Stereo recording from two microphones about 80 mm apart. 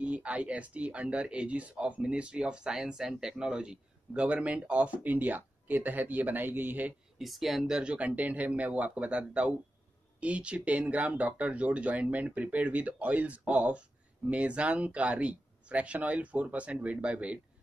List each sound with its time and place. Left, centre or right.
0.0 s speech: centre
7.2 s speech: centre